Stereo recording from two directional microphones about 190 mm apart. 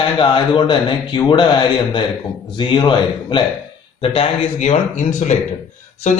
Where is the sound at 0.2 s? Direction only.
25° left (ahead or behind).